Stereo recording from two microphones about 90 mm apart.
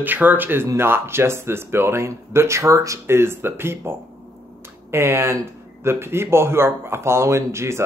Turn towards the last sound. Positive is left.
turn(degrees=-30)  # may be behind; listen again after turning